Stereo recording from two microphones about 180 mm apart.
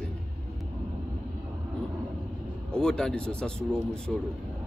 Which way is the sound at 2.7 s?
5° left (ahead or behind).